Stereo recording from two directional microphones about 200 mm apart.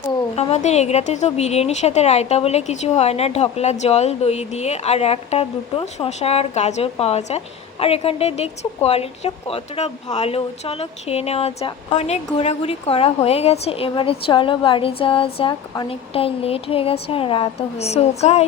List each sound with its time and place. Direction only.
0.3 s a woman's voice: 35° left (ahead or behind)